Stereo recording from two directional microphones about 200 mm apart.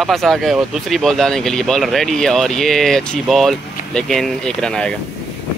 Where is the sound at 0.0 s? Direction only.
Centre (ahead or behind).